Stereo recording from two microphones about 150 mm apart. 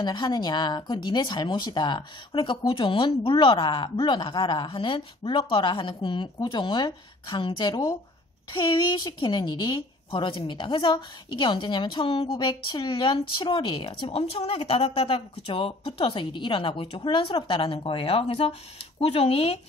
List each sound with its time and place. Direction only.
0.0 s a woman's voice: 30° left (ahead or behind)